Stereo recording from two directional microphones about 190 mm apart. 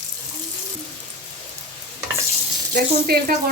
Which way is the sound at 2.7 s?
50° right (ahead or behind).